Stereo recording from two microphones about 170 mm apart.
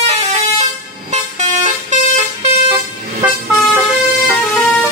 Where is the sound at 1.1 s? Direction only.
45° right (ahead or behind).